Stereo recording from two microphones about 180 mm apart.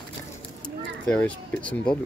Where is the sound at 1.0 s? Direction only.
5° left (ahead or behind).